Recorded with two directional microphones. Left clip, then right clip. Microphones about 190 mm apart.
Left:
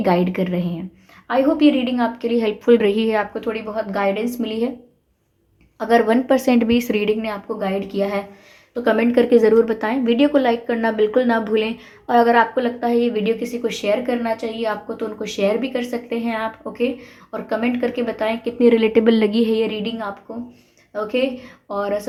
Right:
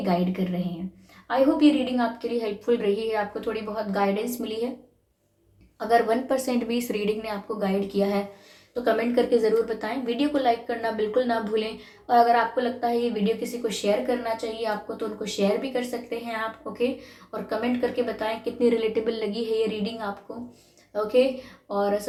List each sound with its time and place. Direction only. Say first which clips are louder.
0.0 s a woman's voice: left 8 dB; 45° left (ahead or behind)
5.9 s a woman's voice: left 6 dB; 40° left (ahead or behind)